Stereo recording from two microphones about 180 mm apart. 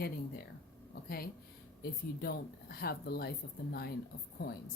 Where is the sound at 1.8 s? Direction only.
55° left (ahead or behind).